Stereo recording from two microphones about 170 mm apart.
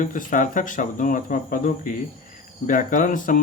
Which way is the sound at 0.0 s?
50° left (ahead or behind).